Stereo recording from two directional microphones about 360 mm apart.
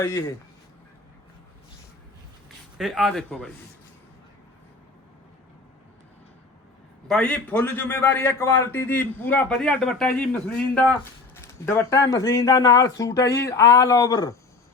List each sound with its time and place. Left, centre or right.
0.0 s speech: centre
2.7 s a man's voice: centre
7.1 s a man's voice: centre